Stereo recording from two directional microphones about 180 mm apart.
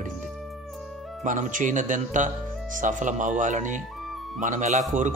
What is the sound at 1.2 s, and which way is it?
Speech, 45° right (ahead or behind).